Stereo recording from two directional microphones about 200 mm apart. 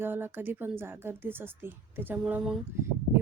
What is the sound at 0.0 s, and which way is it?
A woman's voice, 10° right (ahead or behind).